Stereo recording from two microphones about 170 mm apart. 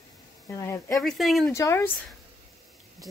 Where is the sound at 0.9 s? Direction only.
Centre (ahead or behind).